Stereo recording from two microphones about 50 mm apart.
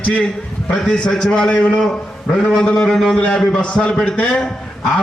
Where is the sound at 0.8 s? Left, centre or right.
Centre.